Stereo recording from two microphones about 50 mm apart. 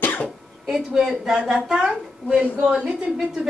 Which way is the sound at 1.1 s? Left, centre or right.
Centre.